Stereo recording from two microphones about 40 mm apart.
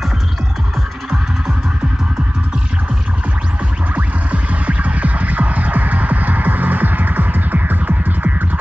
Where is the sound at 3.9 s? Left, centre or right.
Right.